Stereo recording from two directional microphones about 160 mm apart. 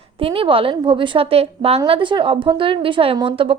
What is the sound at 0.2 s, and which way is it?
A woman's voice, 35° right (ahead or behind).